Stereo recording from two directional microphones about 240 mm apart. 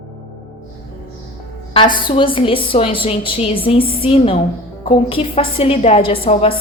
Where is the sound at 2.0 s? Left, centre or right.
Left.